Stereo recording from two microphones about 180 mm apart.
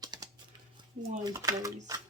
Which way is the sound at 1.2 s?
20° right (ahead or behind).